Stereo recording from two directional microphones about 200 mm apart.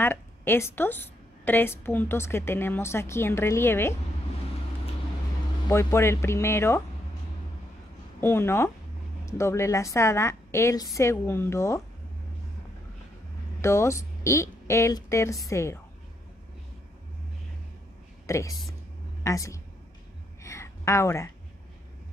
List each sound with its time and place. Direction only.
0.0 s a woman's voice: 10° left (ahead or behind)
5.7 s a woman's voice: 15° left (ahead or behind)
8.2 s a woman's voice: 10° left (ahead or behind)
13.6 s a woman's voice: 15° left (ahead or behind)
18.2 s a woman's voice: 15° left (ahead or behind)
20.4 s a sound: 15° left (ahead or behind)